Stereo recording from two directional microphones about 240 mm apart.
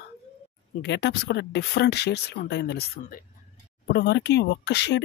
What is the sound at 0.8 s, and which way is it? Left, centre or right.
Speech, left.